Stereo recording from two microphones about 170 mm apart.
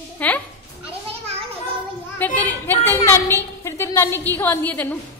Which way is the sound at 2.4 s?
10° left (ahead or behind).